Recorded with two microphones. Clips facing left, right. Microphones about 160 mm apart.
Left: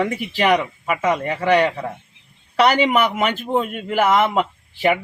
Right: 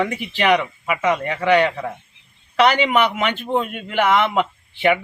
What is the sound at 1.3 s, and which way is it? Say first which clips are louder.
A man's voice: even; 40° left (ahead or behind).